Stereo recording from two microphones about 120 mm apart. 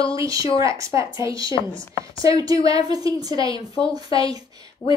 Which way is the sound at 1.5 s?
40° left (ahead or behind).